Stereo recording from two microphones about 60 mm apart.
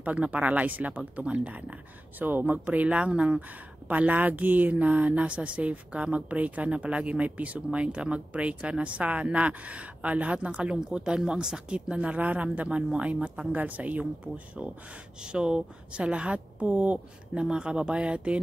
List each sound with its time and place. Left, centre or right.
0.0 s a woman's voice: right
17.3 s speech: centre